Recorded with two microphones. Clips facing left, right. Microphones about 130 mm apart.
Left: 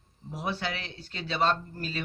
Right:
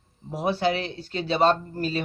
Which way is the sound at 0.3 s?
30° right (ahead or behind).